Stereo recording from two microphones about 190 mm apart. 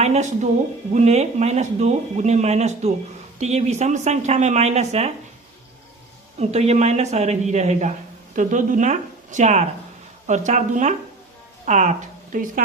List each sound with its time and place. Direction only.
0.0 s speech: 35° right (ahead or behind)
6.4 s a woman's voice: 35° right (ahead or behind)